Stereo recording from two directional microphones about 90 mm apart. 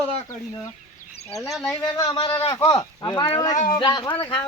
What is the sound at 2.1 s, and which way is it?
Speech, 90° left.